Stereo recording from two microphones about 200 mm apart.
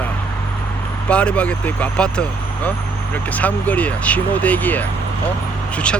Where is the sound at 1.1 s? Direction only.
5° left (ahead or behind).